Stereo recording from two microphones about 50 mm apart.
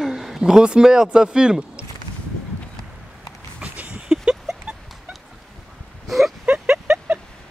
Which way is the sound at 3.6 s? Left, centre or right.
Right.